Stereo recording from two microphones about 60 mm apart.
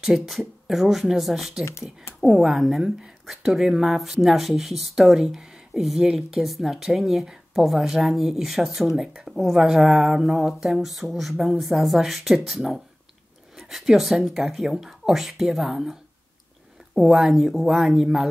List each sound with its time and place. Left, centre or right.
0.0 s speech: centre
1.6 s speech: left
2.1 s speech: centre